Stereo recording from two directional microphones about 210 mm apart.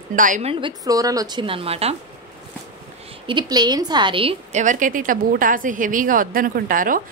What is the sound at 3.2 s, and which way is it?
A woman's voice, 20° right (ahead or behind).